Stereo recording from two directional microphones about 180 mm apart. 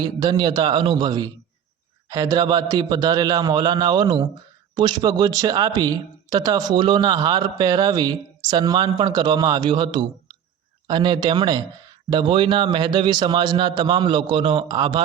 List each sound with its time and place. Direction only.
0.0 s speech: 25° right (ahead or behind)